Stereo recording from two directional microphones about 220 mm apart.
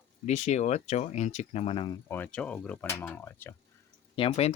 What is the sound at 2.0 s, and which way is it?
Speech, 10° left (ahead or behind).